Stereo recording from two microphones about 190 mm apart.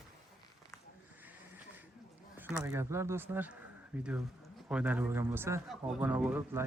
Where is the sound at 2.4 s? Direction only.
15° right (ahead or behind).